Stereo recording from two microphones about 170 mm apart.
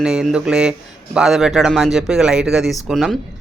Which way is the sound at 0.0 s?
5° right (ahead or behind).